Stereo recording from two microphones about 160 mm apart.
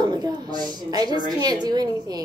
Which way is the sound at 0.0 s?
25° right (ahead or behind).